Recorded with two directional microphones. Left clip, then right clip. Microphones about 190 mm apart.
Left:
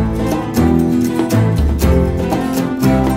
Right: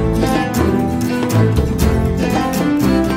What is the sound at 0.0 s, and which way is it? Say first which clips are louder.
Music: right 2 dB; centre (ahead or behind).